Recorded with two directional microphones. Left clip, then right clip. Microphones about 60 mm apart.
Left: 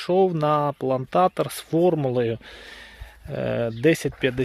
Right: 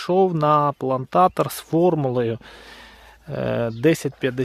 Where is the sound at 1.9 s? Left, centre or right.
Right.